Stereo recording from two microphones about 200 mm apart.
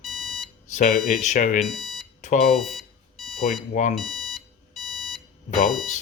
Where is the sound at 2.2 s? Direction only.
40° left (ahead or behind).